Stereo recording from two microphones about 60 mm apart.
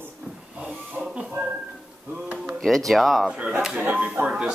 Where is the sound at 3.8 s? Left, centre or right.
Right.